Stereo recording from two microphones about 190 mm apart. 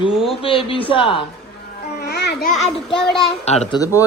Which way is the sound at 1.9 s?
60° left (ahead or behind).